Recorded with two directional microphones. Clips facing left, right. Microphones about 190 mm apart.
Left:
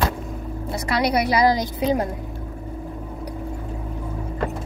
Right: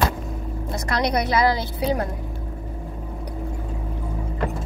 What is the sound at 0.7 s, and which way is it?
A woman's voice, 5° left (ahead or behind).